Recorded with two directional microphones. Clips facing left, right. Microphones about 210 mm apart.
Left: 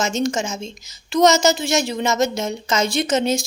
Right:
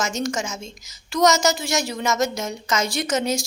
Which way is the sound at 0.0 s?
25° left (ahead or behind).